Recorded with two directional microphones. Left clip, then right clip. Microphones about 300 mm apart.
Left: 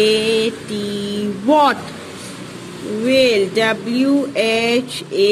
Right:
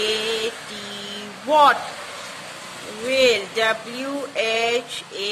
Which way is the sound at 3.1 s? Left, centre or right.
Centre.